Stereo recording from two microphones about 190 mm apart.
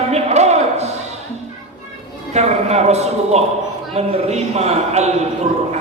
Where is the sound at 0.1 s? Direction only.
35° right (ahead or behind).